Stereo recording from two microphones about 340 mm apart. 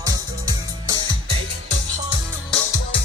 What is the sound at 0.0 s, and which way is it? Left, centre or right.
Music, centre.